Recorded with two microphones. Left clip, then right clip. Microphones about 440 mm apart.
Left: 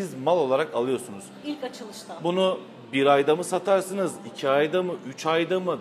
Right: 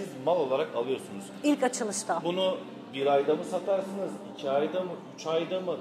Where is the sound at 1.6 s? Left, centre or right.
Right.